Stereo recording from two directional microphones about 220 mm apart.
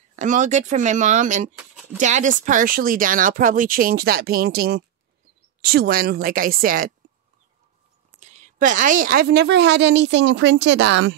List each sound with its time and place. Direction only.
0.1 s a woman's voice: 35° right (ahead or behind)
8.2 s a woman's voice: 30° right (ahead or behind); by 11.1 s 55° right (ahead or behind)